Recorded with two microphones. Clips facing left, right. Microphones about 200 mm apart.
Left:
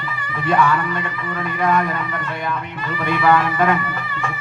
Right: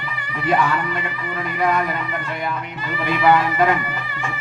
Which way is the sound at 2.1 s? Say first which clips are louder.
Left 1 dB; 15° right (ahead or behind).